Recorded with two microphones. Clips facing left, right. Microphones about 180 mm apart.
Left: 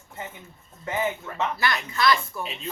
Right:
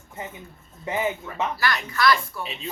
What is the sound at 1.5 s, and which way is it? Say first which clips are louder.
Speech: right 1 dB; 20° left (ahead or behind).